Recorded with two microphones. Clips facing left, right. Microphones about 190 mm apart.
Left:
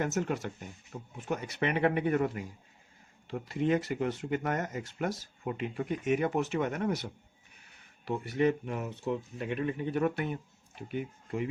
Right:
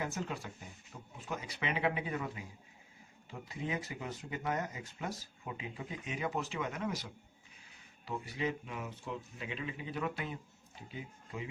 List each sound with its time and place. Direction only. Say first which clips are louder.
0.0 s speech: left 8 dB; 65° left (ahead or behind)
8.2 s speech: left 11 dB; 65° left (ahead or behind)